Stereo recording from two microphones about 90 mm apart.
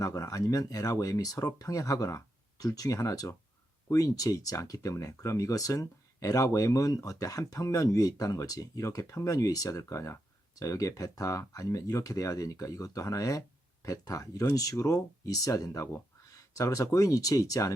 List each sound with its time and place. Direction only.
0.0 s speech: 35° left (ahead or behind)